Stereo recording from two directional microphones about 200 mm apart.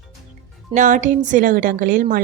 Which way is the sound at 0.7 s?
40° right (ahead or behind).